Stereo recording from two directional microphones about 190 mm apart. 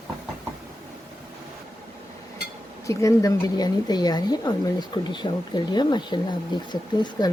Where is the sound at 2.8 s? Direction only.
15° left (ahead or behind).